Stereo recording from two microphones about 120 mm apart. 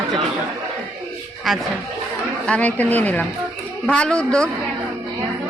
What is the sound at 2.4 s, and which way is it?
Speech, 10° left (ahead or behind).